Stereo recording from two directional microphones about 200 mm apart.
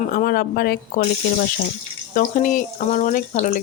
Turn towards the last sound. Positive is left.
turn(degrees=40)  # may be behind; listen again after turning